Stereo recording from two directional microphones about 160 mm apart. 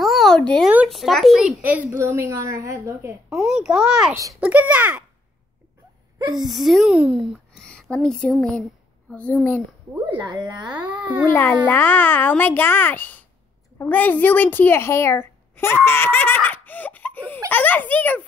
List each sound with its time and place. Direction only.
0.0 s a sound: centre (ahead or behind)
0.7 s speech: 5° right (ahead or behind)
3.3 s a child's voice: 5° right (ahead or behind)
4.1 s speech: 20° right (ahead or behind)
4.4 s speech: 10° right (ahead or behind)
6.3 s a woman's voice: centre (ahead or behind)
10.0 s speech: 30° right (ahead or behind)
10.7 s speech: 10° right (ahead or behind)
11.2 s a child's voice: 10° left (ahead or behind)